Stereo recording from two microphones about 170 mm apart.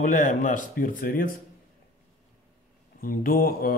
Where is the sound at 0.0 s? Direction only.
45° left (ahead or behind).